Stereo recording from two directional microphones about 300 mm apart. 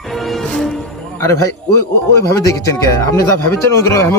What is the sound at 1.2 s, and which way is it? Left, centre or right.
Speech, centre.